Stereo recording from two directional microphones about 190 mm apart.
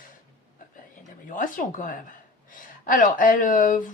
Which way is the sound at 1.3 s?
40° left (ahead or behind).